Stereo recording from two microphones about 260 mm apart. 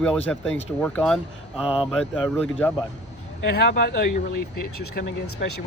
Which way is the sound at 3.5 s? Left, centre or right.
Left.